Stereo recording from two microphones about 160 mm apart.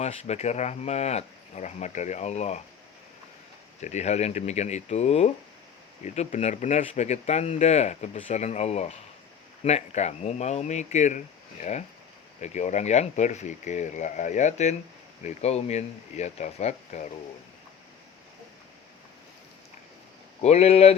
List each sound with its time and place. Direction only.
0.0 s speech: 40° left (ahead or behind)
3.8 s speech: 45° left (ahead or behind)
20.4 s speech: 40° left (ahead or behind)